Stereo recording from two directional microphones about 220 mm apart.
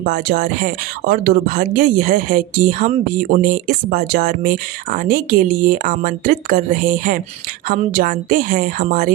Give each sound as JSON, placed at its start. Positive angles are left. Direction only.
{"t": 0.0, "sound": "speech", "side_deg": -40}